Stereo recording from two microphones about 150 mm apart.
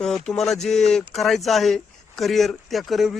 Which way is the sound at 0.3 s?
Centre (ahead or behind).